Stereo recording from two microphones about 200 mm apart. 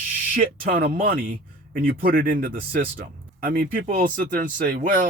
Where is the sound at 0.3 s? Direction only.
45° right (ahead or behind).